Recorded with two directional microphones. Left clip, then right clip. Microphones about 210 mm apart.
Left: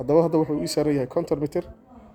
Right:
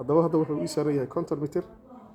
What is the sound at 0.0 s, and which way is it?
A man's voice, 25° left (ahead or behind).